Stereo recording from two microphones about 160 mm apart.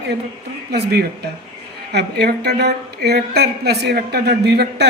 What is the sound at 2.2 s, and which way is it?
A woman's voice, 90° right.